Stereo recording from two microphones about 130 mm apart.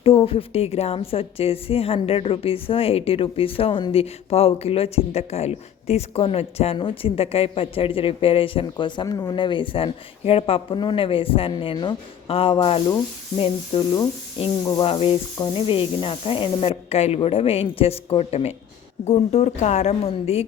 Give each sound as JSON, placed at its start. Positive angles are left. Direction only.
{"t": 0.0, "sound": "a woman's voice", "side_deg": 45}
{"t": 8.8, "sound": "a woman's voice", "side_deg": 30}
{"t": 14.6, "sound": "speech", "side_deg": 30}
{"t": 14.8, "sound": "a woman's voice", "side_deg": 50}